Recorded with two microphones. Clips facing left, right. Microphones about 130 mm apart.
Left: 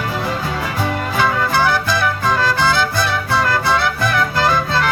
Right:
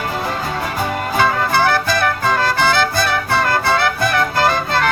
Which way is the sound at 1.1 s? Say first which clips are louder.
Right 1 dB; 50° right (ahead or behind).